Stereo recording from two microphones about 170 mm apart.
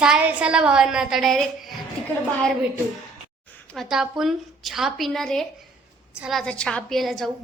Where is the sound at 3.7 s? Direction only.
Centre (ahead or behind).